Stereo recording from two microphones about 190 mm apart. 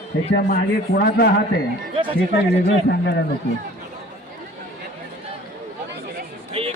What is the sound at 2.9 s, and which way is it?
Speech, 65° left (ahead or behind).